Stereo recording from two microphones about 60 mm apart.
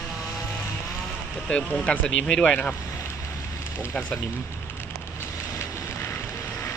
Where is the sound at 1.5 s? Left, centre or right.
Left.